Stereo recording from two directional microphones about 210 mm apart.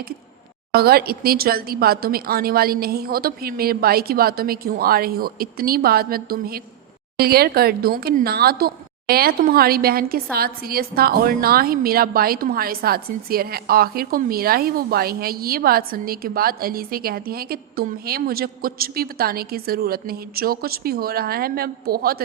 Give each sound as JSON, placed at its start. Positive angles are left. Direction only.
{"t": 0.7, "sound": "a woman's voice", "side_deg": -50}